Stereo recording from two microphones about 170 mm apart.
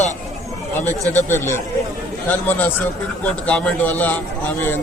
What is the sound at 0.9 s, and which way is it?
A man's voice, 15° left (ahead or behind).